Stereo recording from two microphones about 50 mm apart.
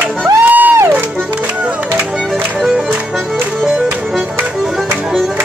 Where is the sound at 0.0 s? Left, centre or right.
Right.